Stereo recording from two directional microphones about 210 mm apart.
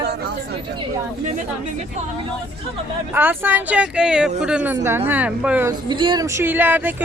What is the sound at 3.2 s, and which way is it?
Speech, 10° right (ahead or behind).